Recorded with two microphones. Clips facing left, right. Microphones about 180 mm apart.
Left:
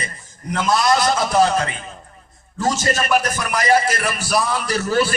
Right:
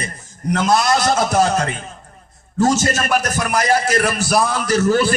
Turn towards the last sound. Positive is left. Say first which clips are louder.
# right 3 dB
turn(degrees=-50)  # may be behind; listen again after turning